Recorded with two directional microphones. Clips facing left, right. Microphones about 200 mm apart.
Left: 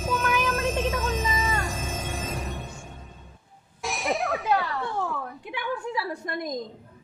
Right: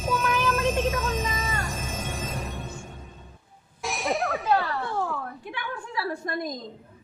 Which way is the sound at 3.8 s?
Centre (ahead or behind).